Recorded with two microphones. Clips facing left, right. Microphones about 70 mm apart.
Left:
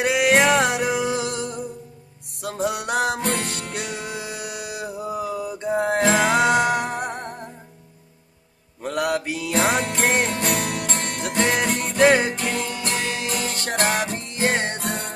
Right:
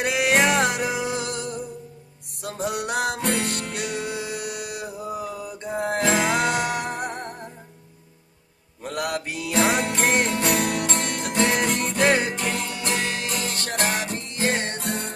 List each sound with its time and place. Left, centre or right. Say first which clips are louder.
0.0 s music: left 3 dB; centre
8.8 s music: left 4 dB; centre
10.5 s music: right 2 dB; right
11.4 s music: even; centre
13.5 s music: left 3 dB; left
14.8 s music: left 1 dB; left